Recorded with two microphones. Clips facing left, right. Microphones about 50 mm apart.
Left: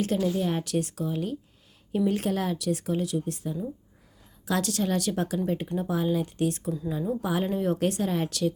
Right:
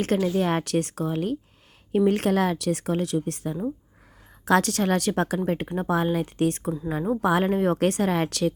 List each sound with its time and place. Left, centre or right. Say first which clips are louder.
0.0 s a woman's voice: right 3 dB; right